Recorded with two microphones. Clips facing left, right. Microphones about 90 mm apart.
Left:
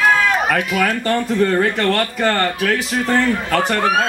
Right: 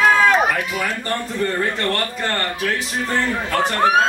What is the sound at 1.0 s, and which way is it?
Speech, 80° left.